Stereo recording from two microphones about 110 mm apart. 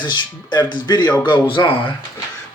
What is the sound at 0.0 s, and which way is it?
Speech, 45° left (ahead or behind).